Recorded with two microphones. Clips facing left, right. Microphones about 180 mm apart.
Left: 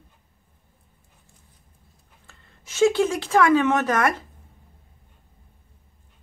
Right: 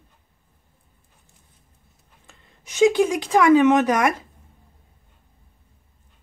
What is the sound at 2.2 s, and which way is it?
Speech, 15° right (ahead or behind).